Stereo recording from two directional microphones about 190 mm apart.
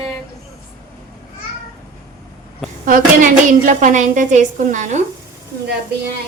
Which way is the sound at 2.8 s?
45° right (ahead or behind).